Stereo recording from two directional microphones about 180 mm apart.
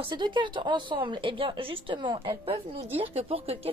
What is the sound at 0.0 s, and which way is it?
A woman's voice, 25° right (ahead or behind).